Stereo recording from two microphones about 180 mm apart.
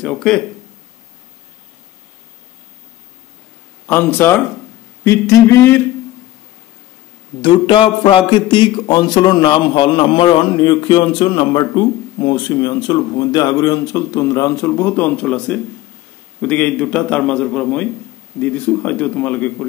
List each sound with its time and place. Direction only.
0.0 s a sound: centre (ahead or behind)
3.8 s a man's voice: 10° left (ahead or behind)
7.4 s a man's voice: 25° left (ahead or behind); by 19.5 s 10° left (ahead or behind)